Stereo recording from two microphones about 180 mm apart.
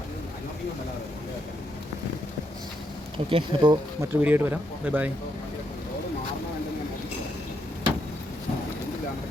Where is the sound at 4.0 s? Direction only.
10° right (ahead or behind).